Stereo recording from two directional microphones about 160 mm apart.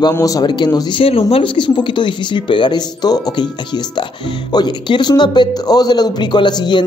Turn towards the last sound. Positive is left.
turn(degrees=25)  # may be behind; listen again after turning